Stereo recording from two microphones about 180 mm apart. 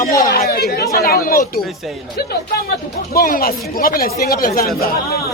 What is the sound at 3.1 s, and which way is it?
Speech, 55° left (ahead or behind).